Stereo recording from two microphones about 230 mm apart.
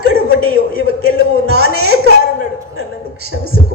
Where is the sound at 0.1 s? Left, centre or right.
Right.